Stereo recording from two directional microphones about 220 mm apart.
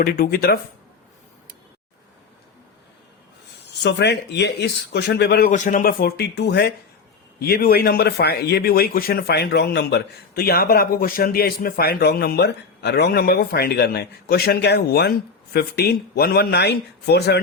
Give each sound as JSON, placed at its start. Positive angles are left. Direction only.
{"t": 0.0, "sound": "a man's voice", "side_deg": 45}
{"t": 3.8, "sound": "a man's voice", "side_deg": 50}